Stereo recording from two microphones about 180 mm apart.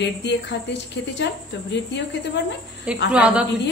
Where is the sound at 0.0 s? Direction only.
75° left (ahead or behind).